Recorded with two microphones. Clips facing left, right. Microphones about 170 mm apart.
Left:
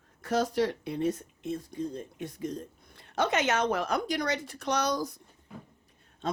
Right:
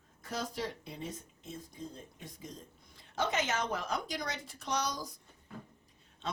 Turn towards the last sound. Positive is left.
turn(degrees=50)  # may be behind; listen again after turning